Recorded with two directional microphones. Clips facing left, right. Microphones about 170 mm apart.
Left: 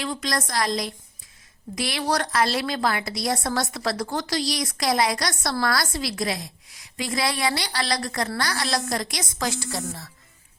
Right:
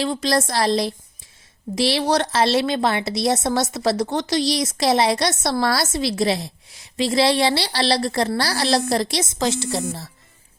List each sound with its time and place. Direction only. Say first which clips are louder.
0.0 s a woman's voice: right 7 dB; 30° right (ahead or behind)